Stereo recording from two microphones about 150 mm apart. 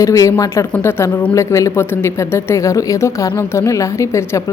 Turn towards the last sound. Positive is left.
turn(degrees=20)  # may be behind; listen again after turning